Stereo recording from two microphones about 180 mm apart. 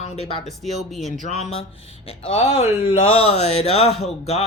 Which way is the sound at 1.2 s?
40° left (ahead or behind).